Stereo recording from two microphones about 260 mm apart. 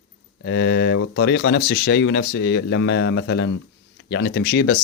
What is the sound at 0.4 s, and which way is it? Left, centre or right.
Speech, left.